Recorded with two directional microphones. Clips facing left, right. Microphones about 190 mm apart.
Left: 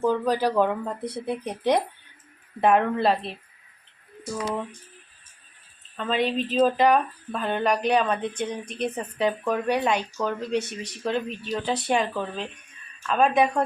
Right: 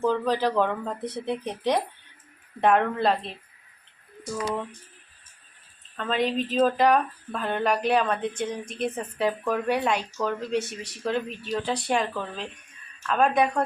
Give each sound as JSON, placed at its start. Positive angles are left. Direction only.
{"t": 0.0, "sound": "speech", "side_deg": 10}
{"t": 6.0, "sound": "speech", "side_deg": 0}